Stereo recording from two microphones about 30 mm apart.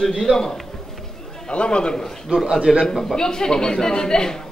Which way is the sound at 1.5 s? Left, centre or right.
Left.